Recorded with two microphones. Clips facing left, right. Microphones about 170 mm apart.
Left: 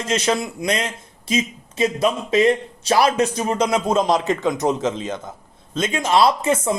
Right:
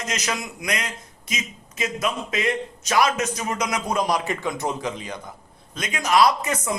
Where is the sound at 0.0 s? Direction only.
30° left (ahead or behind).